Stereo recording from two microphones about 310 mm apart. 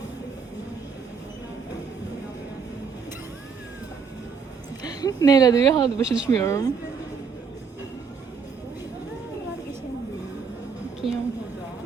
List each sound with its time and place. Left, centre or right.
4.8 s a woman's voice: centre
6.1 s speech: centre
6.4 s a woman's voice: centre
11.0 s a sound: centre